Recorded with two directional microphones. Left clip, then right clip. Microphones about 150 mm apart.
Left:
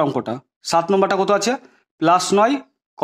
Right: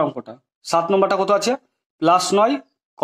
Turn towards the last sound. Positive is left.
turn(degrees=25)  # may be behind; listen again after turning